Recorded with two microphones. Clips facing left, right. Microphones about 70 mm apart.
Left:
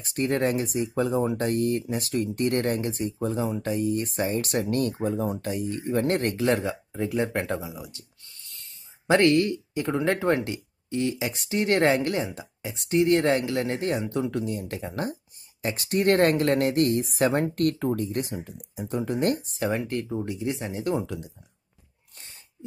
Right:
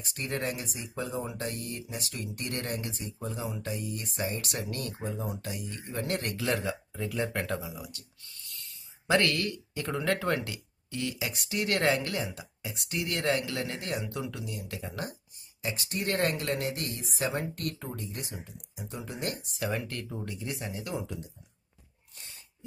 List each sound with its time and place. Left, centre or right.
0.1 s speech: left
15.6 s speech: left
19.6 s speech: left
22.1 s sneeze: left